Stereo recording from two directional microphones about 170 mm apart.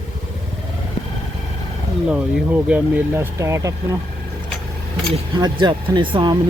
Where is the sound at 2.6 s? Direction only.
10° right (ahead or behind).